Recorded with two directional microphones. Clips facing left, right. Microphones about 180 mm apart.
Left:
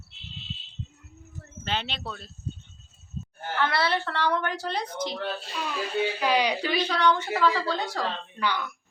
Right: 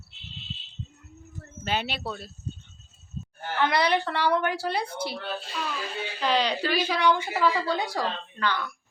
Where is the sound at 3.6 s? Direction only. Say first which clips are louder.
Right 2 dB; 15° right (ahead or behind).